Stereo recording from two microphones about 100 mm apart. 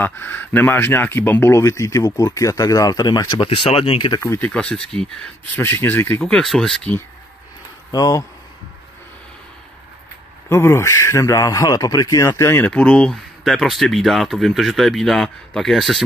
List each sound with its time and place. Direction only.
0.0 s speech: 20° left (ahead or behind); by 3.3 s 40° left (ahead or behind)
3.3 s speech: 70° left (ahead or behind)
4.2 s speech: 20° left (ahead or behind)
4.5 s speech: 5° left (ahead or behind)
5.6 s speech: 20° left (ahead or behind)
6.2 s speech: 5° left (ahead or behind)
7.9 s speech: 35° left (ahead or behind)
10.5 s speech: 25° left (ahead or behind)
12.3 s speech: 25° left (ahead or behind)
12.6 s speech: 10° left (ahead or behind)